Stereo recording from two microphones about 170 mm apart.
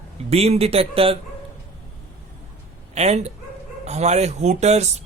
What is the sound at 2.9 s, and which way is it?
Speech, 40° right (ahead or behind).